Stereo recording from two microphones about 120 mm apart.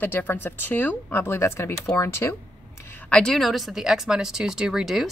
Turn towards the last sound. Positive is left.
turn(degrees=0)  # may be behind; listen again after turning